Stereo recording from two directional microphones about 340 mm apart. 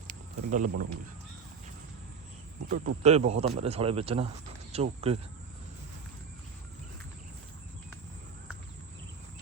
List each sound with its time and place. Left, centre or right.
0.5 s speech: right
2.6 s speech: right